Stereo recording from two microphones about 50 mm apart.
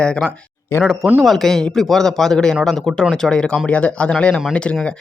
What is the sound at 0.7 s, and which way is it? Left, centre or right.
Speech, left.